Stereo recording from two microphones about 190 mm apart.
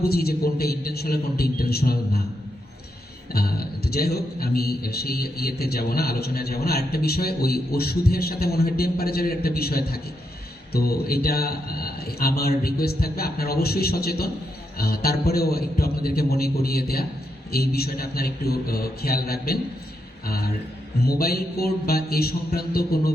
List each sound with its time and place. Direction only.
0.0 s a man's voice: 55° left (ahead or behind)
3.3 s a man's voice: 55° left (ahead or behind)
21.0 s a man's voice: 55° left (ahead or behind)